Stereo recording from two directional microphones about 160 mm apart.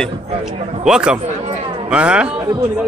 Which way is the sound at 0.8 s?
5° right (ahead or behind).